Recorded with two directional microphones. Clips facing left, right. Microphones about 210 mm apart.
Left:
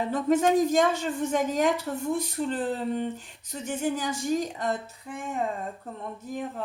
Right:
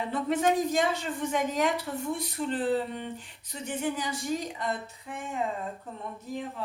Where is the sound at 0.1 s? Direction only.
45° left (ahead or behind).